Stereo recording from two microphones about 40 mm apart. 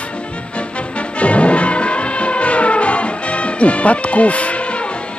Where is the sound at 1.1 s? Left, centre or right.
Left.